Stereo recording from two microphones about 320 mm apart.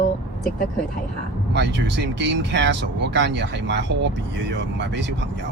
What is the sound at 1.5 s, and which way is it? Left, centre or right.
Speech, right.